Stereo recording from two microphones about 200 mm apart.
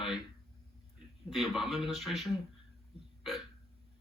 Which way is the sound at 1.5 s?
Centre (ahead or behind).